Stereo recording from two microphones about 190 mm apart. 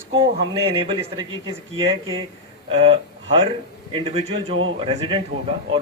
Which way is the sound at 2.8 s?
30° right (ahead or behind).